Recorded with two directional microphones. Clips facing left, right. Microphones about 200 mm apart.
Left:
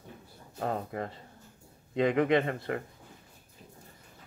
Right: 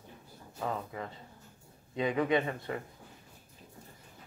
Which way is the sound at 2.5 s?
65° left (ahead or behind).